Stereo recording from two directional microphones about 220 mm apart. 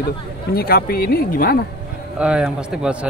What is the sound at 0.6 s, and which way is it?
Speech, 45° left (ahead or behind).